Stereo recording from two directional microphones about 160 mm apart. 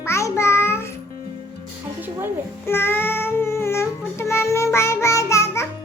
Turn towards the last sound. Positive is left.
turn(degrees=20)  # may be behind; listen again after turning